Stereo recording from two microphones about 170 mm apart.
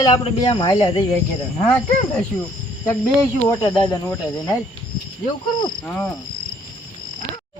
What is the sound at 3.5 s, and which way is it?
Cricket, 20° left (ahead or behind).